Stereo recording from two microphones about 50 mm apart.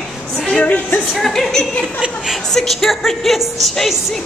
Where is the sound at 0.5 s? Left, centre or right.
Left.